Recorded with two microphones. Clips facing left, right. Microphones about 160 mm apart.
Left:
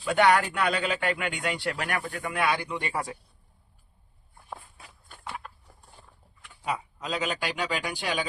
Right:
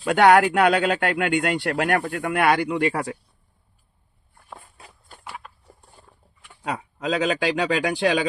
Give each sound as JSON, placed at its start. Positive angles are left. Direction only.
{"t": 0.0, "sound": "speech", "side_deg": -70}
{"t": 5.2, "sound": "a sound", "side_deg": 0}
{"t": 6.7, "sound": "a man's voice", "side_deg": -75}